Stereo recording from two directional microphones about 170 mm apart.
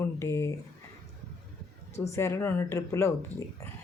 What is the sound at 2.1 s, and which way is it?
Speech, 15° left (ahead or behind).